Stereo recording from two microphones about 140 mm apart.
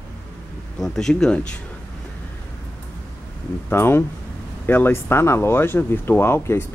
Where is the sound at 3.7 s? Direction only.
15° left (ahead or behind).